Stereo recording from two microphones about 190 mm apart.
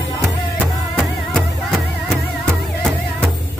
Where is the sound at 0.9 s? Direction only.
Centre (ahead or behind).